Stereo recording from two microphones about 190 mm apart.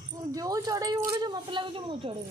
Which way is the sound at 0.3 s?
20° right (ahead or behind).